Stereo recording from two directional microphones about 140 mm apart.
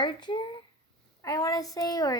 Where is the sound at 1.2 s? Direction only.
25° left (ahead or behind).